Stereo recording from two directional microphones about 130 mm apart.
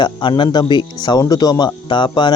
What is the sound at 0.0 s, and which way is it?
Speech, 40° left (ahead or behind).